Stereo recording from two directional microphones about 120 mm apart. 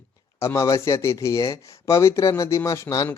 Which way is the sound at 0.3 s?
25° left (ahead or behind).